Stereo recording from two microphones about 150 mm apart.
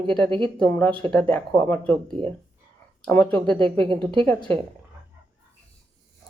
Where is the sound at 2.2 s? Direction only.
40° right (ahead or behind).